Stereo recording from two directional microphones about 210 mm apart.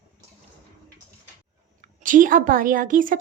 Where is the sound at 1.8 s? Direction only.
40° right (ahead or behind).